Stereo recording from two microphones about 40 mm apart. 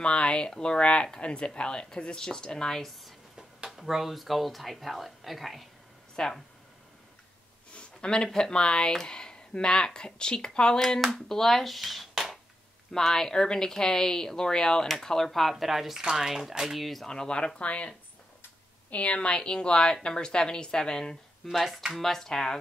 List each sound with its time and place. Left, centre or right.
0.0 s a woman's voice: left
3.7 s speech: centre
6.2 s a woman's voice: centre
7.7 s a sound: left
8.4 s a woman's voice: left; by 16.8 s centre
16.8 s speech: centre
17.1 s a woman's voice: left
19.1 s a woman's voice: left
21.5 s a woman's voice: centre